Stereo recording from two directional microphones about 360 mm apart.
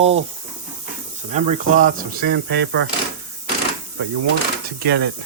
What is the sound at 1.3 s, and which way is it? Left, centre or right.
Speech, centre.